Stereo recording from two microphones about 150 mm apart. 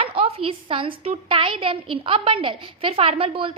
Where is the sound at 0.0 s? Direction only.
40° right (ahead or behind).